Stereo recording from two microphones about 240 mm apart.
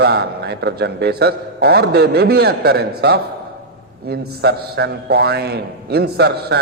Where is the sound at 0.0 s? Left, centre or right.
Right.